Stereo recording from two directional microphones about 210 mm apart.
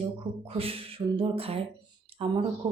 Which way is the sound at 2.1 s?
25° right (ahead or behind).